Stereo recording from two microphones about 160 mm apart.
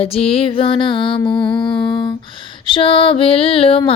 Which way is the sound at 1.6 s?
30° left (ahead or behind).